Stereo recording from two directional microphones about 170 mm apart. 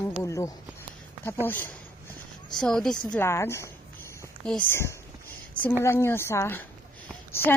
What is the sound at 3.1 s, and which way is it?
A woman's voice, 15° left (ahead or behind).